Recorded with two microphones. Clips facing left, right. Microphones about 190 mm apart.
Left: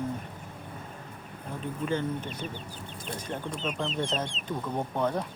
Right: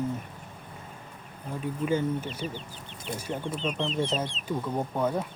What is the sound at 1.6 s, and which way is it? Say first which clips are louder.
Speech: right 3 dB; 10° right (ahead or behind).